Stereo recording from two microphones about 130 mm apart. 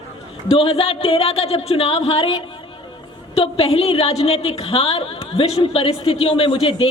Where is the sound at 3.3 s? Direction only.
50° left (ahead or behind).